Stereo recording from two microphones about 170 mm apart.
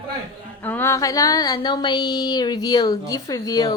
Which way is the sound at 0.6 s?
10° left (ahead or behind).